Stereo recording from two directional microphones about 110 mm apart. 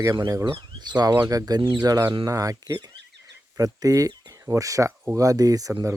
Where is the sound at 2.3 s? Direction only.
30° right (ahead or behind).